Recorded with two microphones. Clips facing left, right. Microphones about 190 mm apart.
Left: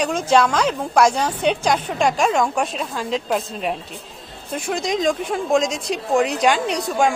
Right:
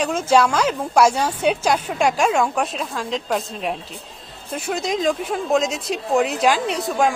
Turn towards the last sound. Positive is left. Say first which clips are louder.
# left 1 dB
turn(degrees=0)  # may be behind; listen again after turning